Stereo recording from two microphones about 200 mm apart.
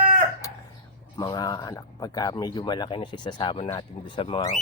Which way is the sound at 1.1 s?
20° left (ahead or behind).